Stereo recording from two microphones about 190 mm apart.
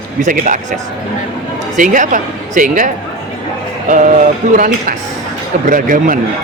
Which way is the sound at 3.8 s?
40° right (ahead or behind).